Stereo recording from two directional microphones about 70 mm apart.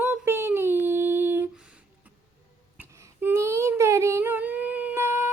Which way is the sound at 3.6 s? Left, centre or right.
Right.